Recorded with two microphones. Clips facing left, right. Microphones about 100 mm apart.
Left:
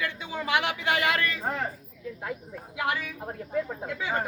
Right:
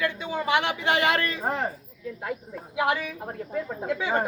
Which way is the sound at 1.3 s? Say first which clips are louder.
Right 3 dB; 25° right (ahead or behind).